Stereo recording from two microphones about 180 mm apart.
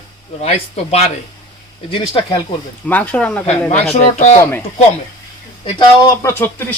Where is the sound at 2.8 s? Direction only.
10° left (ahead or behind).